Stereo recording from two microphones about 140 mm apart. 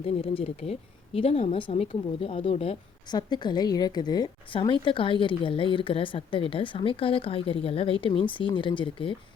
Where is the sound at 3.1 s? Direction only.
30° left (ahead or behind).